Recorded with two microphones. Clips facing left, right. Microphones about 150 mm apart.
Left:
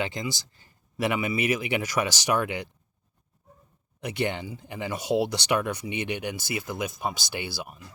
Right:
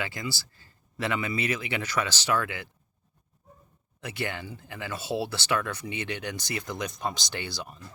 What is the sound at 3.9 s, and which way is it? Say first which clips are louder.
Speech: left 5 dB; 20° left (ahead or behind).